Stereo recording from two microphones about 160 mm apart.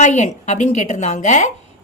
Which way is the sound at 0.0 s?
45° left (ahead or behind).